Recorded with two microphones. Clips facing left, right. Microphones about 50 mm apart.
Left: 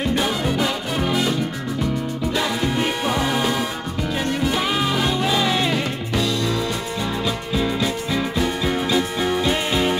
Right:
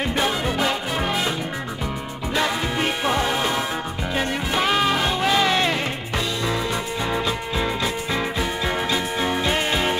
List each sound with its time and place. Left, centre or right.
0.0 s music: centre
2.3 s music: centre
7.8 s music: centre